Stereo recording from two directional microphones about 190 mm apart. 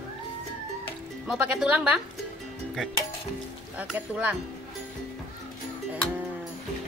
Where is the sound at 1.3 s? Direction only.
5° right (ahead or behind).